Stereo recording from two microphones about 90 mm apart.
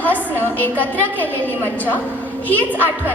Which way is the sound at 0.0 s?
20° left (ahead or behind).